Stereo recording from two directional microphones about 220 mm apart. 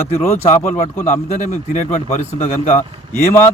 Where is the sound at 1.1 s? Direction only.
35° left (ahead or behind).